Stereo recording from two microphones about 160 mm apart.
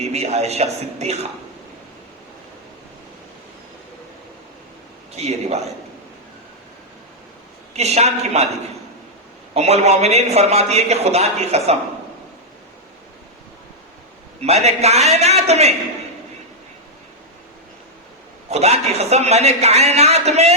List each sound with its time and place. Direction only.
0.0 s a man's voice: 45° right (ahead or behind)
5.1 s a man's voice: 45° right (ahead or behind)
7.7 s a man's voice: 40° right (ahead or behind)
9.6 s a man's voice: 40° right (ahead or behind)
14.4 s a man's voice: 40° right (ahead or behind)
18.5 s a man's voice: 40° right (ahead or behind)